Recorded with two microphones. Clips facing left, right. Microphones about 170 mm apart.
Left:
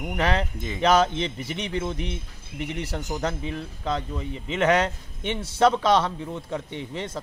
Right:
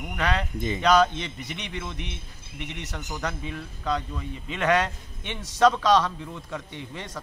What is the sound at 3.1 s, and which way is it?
Speech, 25° left (ahead or behind).